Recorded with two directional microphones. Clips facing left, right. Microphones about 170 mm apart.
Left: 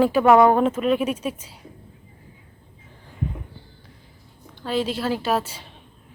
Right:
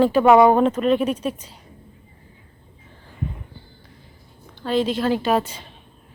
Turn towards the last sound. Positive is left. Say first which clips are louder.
# right 3 dB
turn(degrees=10)  # may be behind; listen again after turning